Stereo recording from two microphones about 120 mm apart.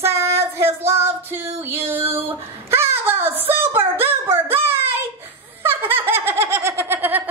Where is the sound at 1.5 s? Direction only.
20° right (ahead or behind).